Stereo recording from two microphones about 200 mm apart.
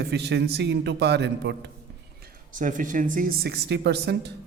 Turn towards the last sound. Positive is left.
turn(degrees=-55)  # may be behind; listen again after turning